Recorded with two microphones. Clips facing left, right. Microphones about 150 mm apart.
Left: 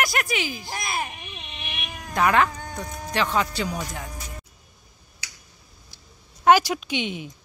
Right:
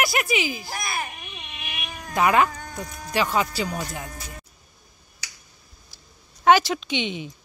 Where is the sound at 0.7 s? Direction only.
25° left (ahead or behind).